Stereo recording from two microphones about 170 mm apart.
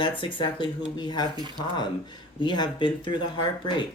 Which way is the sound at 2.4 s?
25° left (ahead or behind).